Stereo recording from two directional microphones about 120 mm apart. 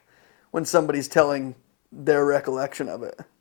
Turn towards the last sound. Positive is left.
turn(degrees=30)  # may be behind; listen again after turning